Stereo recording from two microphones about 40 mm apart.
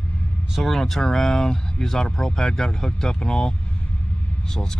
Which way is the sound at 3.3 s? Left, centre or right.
Centre.